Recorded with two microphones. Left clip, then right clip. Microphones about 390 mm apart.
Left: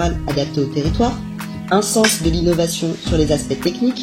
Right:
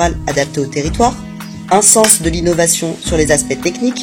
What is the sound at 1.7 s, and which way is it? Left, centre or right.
Speech, right.